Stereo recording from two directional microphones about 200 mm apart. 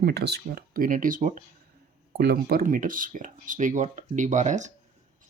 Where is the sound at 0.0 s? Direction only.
55° right (ahead or behind).